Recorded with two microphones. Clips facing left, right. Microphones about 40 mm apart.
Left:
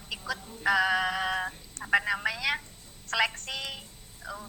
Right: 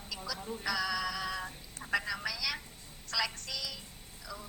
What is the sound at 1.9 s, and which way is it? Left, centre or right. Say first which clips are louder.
Telephone: left 7 dB; left.